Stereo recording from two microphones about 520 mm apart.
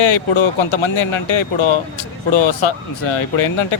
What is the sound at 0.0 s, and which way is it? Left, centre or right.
Speech, left.